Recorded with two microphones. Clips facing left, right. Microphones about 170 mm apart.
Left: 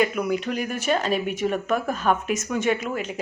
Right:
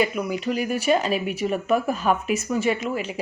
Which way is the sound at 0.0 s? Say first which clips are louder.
Left 1 dB; 5° right (ahead or behind).